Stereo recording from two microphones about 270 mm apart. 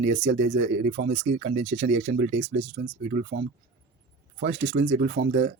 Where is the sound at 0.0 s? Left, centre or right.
Right.